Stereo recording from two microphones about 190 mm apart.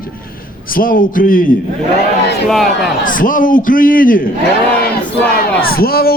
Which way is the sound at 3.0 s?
45° left (ahead or behind).